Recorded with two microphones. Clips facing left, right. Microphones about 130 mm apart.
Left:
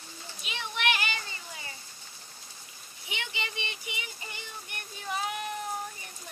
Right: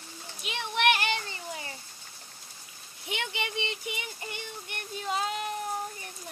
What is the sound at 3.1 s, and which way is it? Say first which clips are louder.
Speech: right 4 dB; 60° right (ahead or behind).